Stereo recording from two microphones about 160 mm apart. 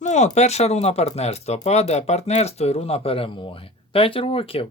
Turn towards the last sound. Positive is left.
turn(degrees=35)  # may be behind; listen again after turning